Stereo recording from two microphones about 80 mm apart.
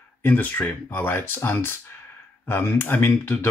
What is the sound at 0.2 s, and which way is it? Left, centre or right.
Speech, left.